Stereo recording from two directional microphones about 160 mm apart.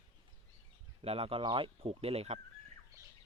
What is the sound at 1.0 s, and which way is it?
Speech, 35° right (ahead or behind).